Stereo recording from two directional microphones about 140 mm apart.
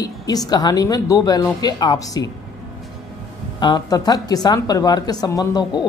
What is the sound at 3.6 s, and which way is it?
Speech, 30° left (ahead or behind).